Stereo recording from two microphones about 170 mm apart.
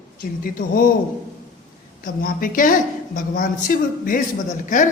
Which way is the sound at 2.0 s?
55° left (ahead or behind).